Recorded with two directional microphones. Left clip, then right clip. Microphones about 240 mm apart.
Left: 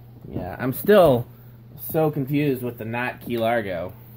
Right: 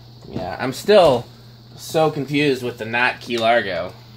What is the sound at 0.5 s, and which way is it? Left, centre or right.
Speech, left.